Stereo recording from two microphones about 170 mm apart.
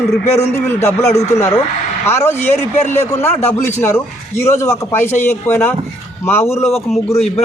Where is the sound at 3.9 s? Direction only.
15° left (ahead or behind).